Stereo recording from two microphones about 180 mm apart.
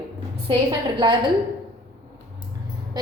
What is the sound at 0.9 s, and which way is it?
Speech, 25° right (ahead or behind).